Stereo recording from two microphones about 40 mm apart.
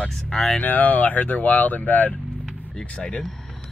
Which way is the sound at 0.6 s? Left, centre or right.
Left.